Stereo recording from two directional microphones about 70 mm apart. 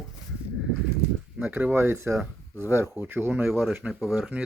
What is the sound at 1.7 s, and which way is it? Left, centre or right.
Speech, right.